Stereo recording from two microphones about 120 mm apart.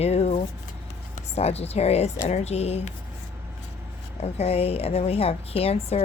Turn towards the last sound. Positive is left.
turn(degrees=55)  # may be behind; listen again after turning